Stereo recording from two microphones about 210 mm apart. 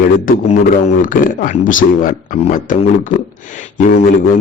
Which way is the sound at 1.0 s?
40° left (ahead or behind).